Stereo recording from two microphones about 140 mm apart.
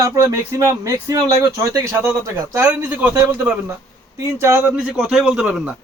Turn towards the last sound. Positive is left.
turn(degrees=-5)  # may be behind; listen again after turning